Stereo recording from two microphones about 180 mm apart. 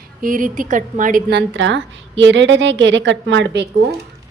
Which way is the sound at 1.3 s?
80° right.